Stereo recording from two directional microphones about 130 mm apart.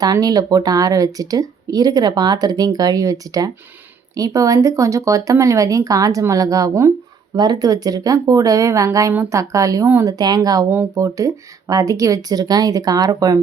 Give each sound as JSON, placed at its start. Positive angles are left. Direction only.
{"t": 0.0, "sound": "speech", "side_deg": -30}